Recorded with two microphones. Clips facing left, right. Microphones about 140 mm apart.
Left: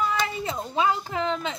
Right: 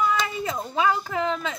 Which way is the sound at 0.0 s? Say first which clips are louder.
Right 2 dB; 30° left (ahead or behind).